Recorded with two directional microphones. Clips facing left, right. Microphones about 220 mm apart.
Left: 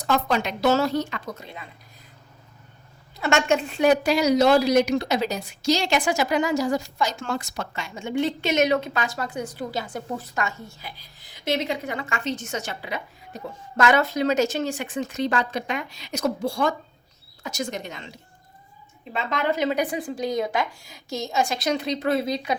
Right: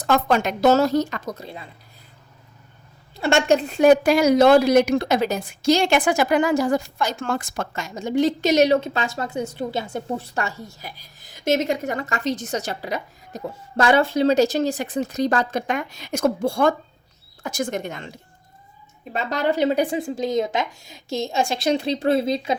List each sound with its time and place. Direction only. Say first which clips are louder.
0.0 s a woman's voice: right 4 dB; 50° right (ahead or behind); by 1.6 s 35° right (ahead or behind)
3.2 s a woman's voice: right 3 dB; 30° right (ahead or behind); by 18.1 s 50° right (ahead or behind)
19.1 s speech: right 3 dB; 40° right (ahead or behind)